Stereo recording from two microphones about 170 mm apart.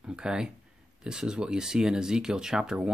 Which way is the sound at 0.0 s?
5° right (ahead or behind).